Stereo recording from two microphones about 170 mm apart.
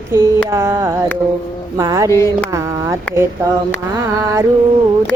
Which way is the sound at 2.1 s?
15° left (ahead or behind).